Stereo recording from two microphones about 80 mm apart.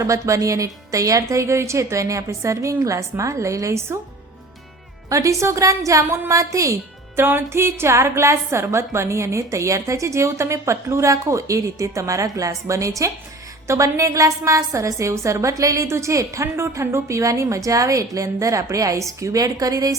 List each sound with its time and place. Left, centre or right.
0.0 s a woman's voice: right
5.0 s a woman's voice: right
7.2 s a woman's voice: right